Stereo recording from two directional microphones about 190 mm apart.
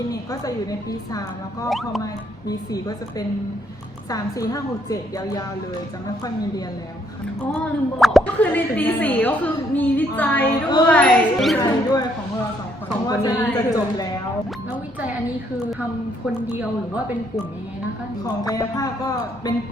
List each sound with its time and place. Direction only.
0.1 s a woman's voice: 20° left (ahead or behind)
2.5 s a woman's voice: 20° left (ahead or behind)
7.4 s speech: 5° left (ahead or behind)
11.6 s a woman's voice: 20° left (ahead or behind)
13.1 s a woman's voice: 20° left (ahead or behind)
18.4 s a woman's voice: 20° left (ahead or behind)